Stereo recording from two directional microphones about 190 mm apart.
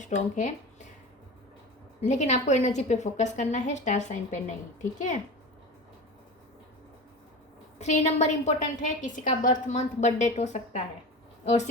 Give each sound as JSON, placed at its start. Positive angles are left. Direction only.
{"t": 0.0, "sound": "speech", "side_deg": 40}
{"t": 2.0, "sound": "a woman's voice", "side_deg": 40}
{"t": 7.8, "sound": "a woman's voice", "side_deg": 35}